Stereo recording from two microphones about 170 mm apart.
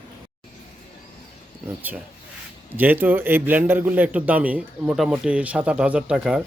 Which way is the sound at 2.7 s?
10° right (ahead or behind).